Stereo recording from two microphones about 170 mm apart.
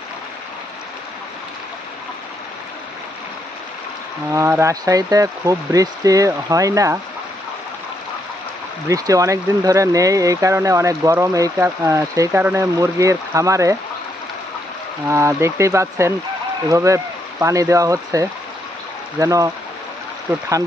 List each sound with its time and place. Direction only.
4.3 s speech: 15° right (ahead or behind)
8.8 s speech: 20° right (ahead or behind)
15.0 s speech: 15° right (ahead or behind)